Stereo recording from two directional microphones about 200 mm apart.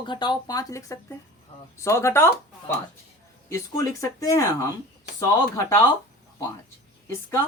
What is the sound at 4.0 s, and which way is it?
Speech, 15° left (ahead or behind).